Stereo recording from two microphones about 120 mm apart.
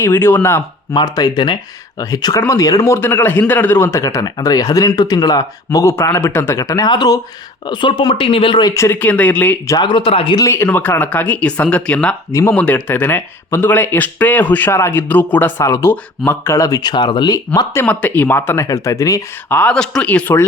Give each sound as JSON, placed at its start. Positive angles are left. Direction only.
{"t": 0.0, "sound": "a man's voice", "side_deg": 20}
{"t": 0.9, "sound": "a man's voice", "side_deg": 35}
{"t": 8.7, "sound": "speech", "side_deg": 20}
{"t": 9.7, "sound": "speech", "side_deg": 45}
{"t": 10.3, "sound": "speech", "side_deg": 25}
{"t": 12.3, "sound": "a man's voice", "side_deg": 25}
{"t": 12.5, "sound": "speech", "side_deg": 15}
{"t": 17.8, "sound": "a man's voice", "side_deg": 15}
{"t": 19.5, "sound": "speech", "side_deg": 15}
{"t": 19.7, "sound": "speech", "side_deg": 5}